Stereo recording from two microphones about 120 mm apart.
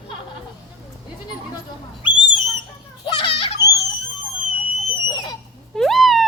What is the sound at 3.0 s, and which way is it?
Children playing, 45° left (ahead or behind).